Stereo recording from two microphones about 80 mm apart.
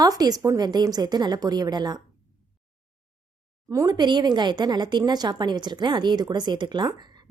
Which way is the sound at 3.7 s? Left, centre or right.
Right.